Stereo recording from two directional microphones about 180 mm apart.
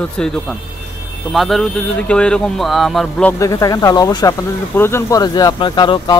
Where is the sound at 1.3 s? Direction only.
Centre (ahead or behind).